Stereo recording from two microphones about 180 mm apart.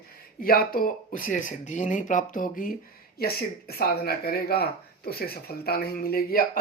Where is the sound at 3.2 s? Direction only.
60° left (ahead or behind).